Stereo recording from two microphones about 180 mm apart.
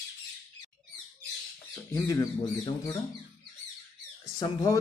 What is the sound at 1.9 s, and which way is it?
Speech, 15° left (ahead or behind).